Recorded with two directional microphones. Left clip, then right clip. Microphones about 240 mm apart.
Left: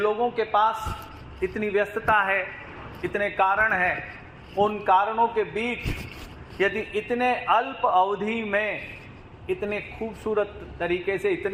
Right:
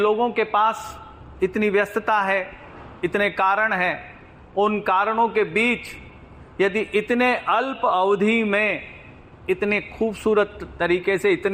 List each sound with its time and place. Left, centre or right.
0.0 s a man's voice: right